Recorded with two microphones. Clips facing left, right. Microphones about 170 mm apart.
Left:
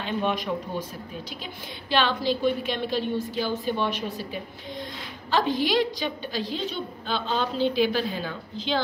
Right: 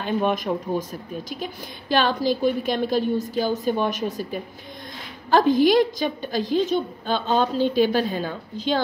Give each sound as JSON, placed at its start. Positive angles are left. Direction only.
{"t": 0.0, "sound": "a woman's voice", "side_deg": -45}